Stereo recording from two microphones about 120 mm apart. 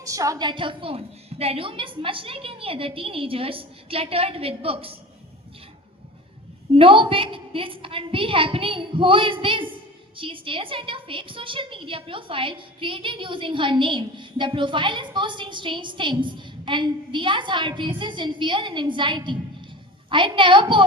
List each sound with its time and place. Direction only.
0.0 s a woman's voice: 30° right (ahead or behind); by 4.9 s 50° right (ahead or behind)
6.7 s a woman's voice: 45° right (ahead or behind)